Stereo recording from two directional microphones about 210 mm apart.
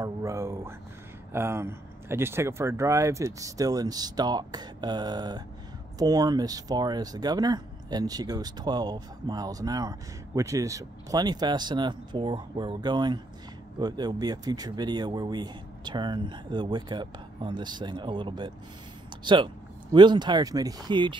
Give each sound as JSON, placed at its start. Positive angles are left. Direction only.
{"t": 0.0, "sound": "speech", "side_deg": -15}